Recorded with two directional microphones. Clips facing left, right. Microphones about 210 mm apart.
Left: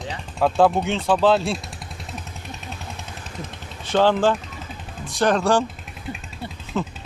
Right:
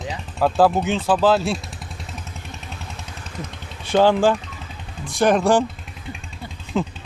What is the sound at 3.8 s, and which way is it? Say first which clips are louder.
Speech: right 2 dB; 10° right (ahead or behind).